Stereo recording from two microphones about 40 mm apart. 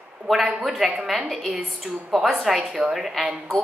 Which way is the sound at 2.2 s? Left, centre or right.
Centre.